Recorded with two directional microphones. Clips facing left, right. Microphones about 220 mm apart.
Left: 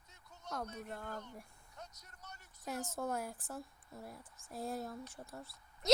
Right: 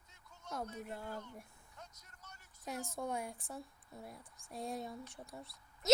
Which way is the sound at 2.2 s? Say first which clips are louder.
Left 4 dB; 70° left (ahead or behind).